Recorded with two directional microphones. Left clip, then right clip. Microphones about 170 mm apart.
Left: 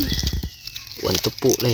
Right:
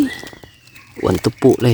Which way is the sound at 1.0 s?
60° right (ahead or behind).